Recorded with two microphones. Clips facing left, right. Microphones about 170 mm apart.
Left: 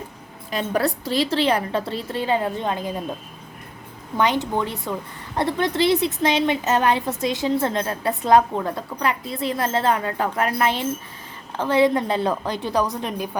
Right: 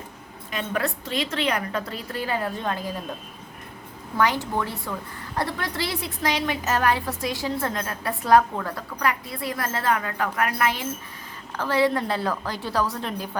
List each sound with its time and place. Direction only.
0.5 s a woman's voice: 35° left (ahead or behind)
4.2 s a woman's voice: 20° left (ahead or behind)